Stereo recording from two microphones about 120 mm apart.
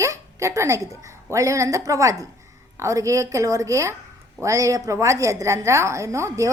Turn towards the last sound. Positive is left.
turn(degrees=-25)  # may be behind; listen again after turning